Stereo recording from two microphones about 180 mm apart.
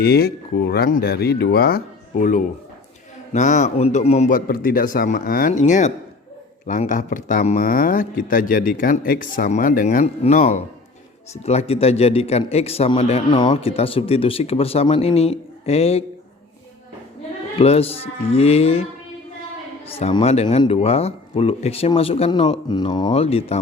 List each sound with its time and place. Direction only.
0.0 s a man's voice: 60° left (ahead or behind); by 16.0 s 35° left (ahead or behind)
17.6 s a man's voice: 35° left (ahead or behind)
20.0 s a man's voice: 35° left (ahead or behind)